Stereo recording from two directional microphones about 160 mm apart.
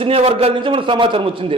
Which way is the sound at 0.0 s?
40° right (ahead or behind).